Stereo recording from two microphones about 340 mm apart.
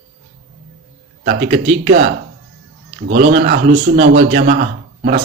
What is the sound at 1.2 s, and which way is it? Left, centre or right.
Speech, right.